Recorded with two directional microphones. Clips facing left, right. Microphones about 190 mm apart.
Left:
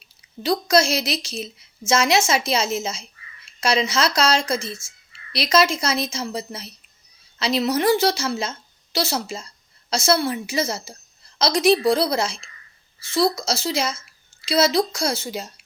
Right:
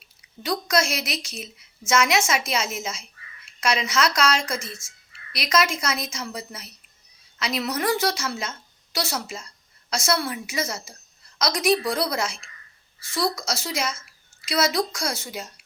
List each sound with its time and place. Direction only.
0.4 s a woman's voice: 30° left (ahead or behind)